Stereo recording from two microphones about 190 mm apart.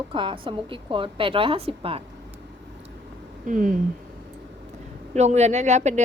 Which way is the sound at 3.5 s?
45° right (ahead or behind).